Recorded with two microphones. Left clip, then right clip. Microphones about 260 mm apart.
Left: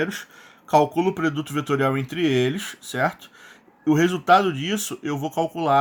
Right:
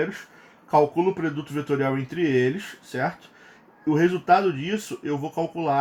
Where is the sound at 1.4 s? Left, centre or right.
Left.